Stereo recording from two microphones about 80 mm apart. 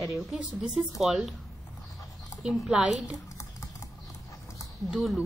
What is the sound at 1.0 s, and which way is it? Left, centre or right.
Speech, centre.